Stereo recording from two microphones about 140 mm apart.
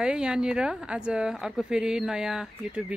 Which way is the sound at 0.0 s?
5° right (ahead or behind).